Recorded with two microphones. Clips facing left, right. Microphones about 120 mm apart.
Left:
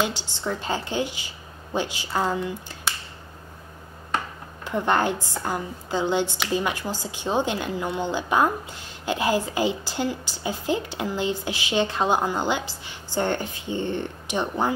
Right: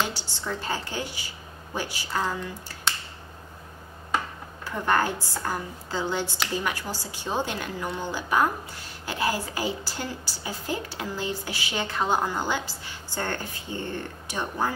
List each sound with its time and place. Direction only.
0.0 s a woman's voice: 20° left (ahead or behind)
4.6 s a woman's voice: 20° left (ahead or behind)